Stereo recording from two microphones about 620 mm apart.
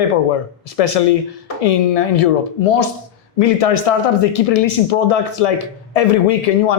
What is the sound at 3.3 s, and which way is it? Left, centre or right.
Speech, left.